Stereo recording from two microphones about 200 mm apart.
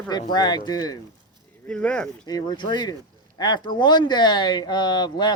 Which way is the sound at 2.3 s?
20° left (ahead or behind).